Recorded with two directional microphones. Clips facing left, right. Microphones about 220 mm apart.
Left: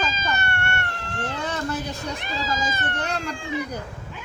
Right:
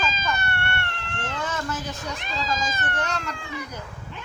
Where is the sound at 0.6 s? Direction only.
45° left (ahead or behind).